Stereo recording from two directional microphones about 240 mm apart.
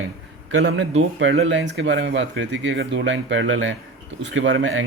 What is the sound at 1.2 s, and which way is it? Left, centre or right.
Speech, right.